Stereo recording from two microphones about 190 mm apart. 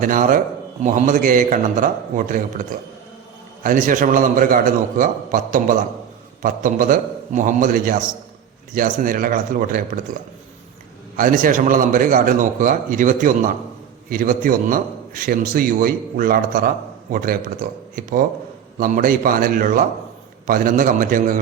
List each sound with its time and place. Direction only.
0.0 s a man's voice: 45° right (ahead or behind)
11.2 s a man's voice: 45° right (ahead or behind)